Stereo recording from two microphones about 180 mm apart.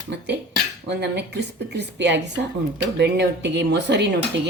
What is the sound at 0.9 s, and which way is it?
A woman's voice, 70° right (ahead or behind).